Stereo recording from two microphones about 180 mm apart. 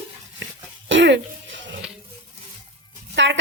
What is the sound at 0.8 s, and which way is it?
Throat clearing, 85° right.